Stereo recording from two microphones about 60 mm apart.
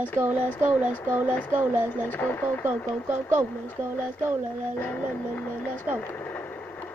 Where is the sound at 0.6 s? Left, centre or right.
Right.